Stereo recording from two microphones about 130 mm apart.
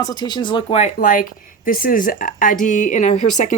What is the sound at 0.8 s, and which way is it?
A woman's voice, 90° left.